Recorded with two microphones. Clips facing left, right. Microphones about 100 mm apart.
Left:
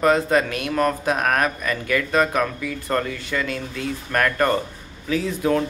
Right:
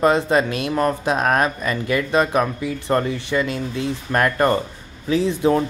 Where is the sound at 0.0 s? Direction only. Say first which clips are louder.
Right 1 dB; 20° right (ahead or behind).